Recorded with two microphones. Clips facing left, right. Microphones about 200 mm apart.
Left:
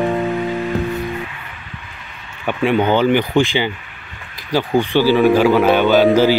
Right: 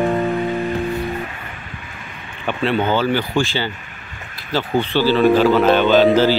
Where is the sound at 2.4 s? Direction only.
15° left (ahead or behind).